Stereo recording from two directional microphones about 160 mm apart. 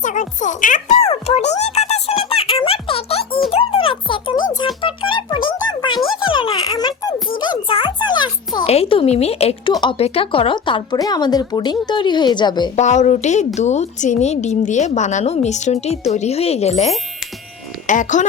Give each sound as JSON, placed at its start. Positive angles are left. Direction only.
{"t": 0.0, "sound": "speech", "side_deg": 50}
{"t": 0.9, "sound": "music", "side_deg": 40}
{"t": 6.1, "sound": "a sound", "side_deg": 30}
{"t": 7.3, "sound": "music", "side_deg": 30}
{"t": 8.7, "sound": "speech", "side_deg": 35}
{"t": 12.7, "sound": "a woman's voice", "side_deg": 45}